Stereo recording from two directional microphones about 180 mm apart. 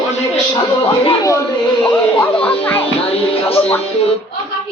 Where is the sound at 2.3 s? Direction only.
30° left (ahead or behind).